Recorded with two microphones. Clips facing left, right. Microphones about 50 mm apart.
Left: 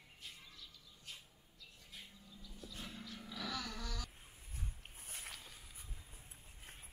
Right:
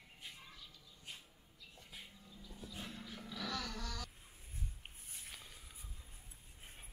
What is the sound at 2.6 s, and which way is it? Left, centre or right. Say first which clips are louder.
Music: right 1 dB; centre.